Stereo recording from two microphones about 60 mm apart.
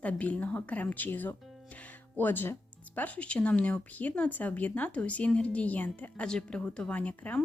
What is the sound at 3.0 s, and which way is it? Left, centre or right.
Speech, left.